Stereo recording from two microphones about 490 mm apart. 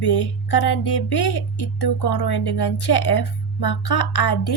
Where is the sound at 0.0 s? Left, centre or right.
Left.